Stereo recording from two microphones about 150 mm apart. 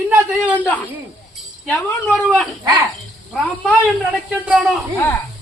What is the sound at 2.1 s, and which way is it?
Speech, centre (ahead or behind).